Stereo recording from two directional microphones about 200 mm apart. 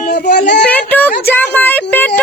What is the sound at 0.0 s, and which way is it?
Child singing, 40° left (ahead or behind).